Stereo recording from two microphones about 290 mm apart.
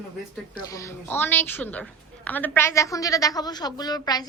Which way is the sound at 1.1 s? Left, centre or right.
Centre.